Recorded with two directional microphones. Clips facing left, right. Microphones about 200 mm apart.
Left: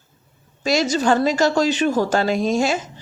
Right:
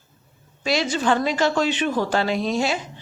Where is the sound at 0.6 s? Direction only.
40° left (ahead or behind).